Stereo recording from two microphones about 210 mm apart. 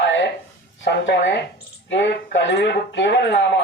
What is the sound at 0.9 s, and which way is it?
Speech, 60° left (ahead or behind).